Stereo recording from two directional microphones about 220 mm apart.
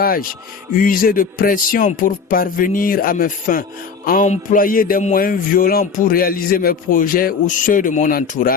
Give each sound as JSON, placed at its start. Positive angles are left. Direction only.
{"t": 0.0, "sound": "speech", "side_deg": 40}
{"t": 0.8, "sound": "music", "side_deg": 40}